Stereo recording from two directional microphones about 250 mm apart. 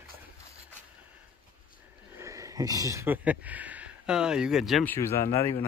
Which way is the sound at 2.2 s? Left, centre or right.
Centre.